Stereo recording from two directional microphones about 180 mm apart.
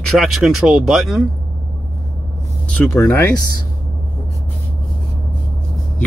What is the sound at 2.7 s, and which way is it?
Speech, 10° left (ahead or behind).